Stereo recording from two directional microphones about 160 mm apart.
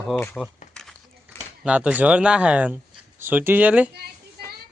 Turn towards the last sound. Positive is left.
turn(degrees=-80)